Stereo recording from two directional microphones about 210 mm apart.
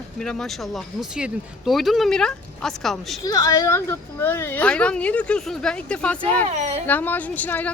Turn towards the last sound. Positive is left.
turn(degrees=10)  # may be behind; listen again after turning